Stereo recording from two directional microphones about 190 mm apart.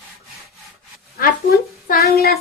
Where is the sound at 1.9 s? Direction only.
55° left (ahead or behind).